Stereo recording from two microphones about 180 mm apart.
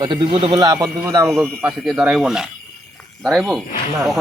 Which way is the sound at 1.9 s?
Centre (ahead or behind).